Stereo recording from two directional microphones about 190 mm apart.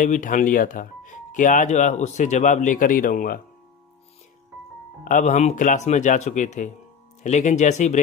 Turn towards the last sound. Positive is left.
turn(degrees=40)  # may be behind; listen again after turning